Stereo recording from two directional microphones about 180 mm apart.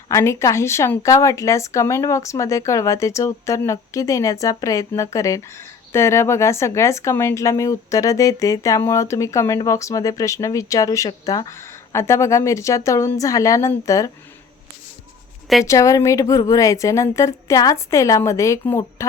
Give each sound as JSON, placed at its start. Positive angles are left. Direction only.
{"t": 0.1, "sound": "a woman's voice", "side_deg": 15}
{"t": 15.6, "sound": "a woman's voice", "side_deg": 15}